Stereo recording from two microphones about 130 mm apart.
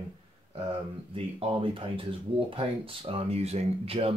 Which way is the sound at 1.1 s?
45° right (ahead or behind).